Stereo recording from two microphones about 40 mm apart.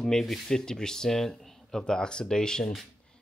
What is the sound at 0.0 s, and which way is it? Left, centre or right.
Speech, centre.